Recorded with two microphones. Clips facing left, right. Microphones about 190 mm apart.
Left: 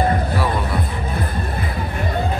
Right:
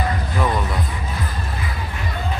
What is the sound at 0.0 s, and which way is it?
Music, 50° left (ahead or behind).